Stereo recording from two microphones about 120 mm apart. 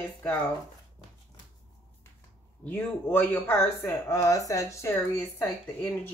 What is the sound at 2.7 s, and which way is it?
Speech, 15° left (ahead or behind).